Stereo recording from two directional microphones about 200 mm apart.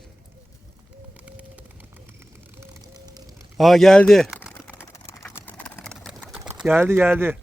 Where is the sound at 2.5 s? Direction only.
15° right (ahead or behind).